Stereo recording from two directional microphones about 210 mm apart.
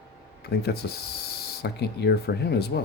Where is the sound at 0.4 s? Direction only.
50° left (ahead or behind).